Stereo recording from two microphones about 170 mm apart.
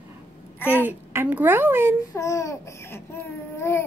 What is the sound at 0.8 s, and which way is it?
Speech, 10° right (ahead or behind).